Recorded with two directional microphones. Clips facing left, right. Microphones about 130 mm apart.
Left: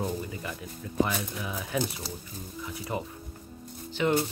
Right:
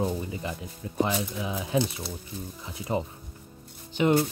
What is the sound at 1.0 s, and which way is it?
Speech, 20° right (ahead or behind).